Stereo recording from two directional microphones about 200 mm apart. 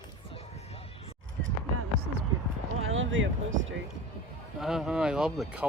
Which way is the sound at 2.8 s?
85° right.